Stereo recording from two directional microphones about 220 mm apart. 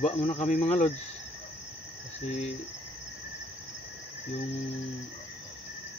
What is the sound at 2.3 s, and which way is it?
Speech, 30° left (ahead or behind).